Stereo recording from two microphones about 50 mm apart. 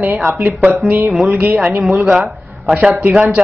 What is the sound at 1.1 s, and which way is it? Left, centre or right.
Speech, centre.